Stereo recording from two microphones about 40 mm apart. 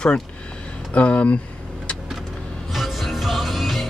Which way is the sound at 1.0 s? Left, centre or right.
Left.